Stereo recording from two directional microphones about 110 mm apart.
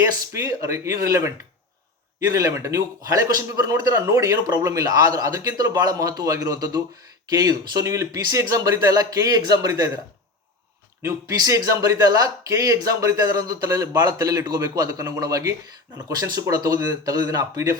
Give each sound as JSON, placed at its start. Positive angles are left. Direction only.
{"t": 0.3, "sound": "a man's voice", "side_deg": -30}
{"t": 11.0, "sound": "a man's voice", "side_deg": -30}